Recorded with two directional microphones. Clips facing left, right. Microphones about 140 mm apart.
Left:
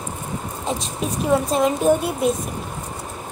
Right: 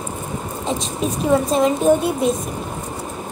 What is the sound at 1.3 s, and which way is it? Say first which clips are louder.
A woman's voice: right 2 dB; 5° left (ahead or behind).